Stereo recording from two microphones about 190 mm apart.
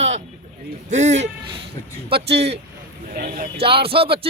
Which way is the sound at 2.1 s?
60° right (ahead or behind).